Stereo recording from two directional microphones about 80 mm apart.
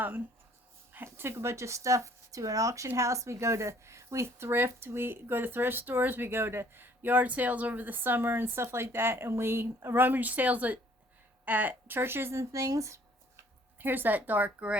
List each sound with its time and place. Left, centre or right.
0.9 s speech: right
13.7 s speech: right